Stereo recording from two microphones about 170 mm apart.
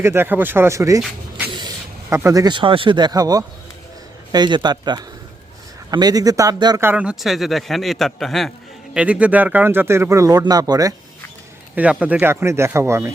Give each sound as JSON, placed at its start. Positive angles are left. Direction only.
{"t": 0.0, "sound": "a man's voice", "side_deg": -15}
{"t": 11.7, "sound": "speech", "side_deg": -10}